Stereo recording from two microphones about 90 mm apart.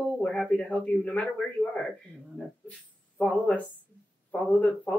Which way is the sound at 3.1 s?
15° left (ahead or behind).